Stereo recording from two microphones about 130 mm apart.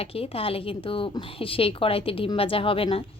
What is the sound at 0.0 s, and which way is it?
Speech, 45° left (ahead or behind).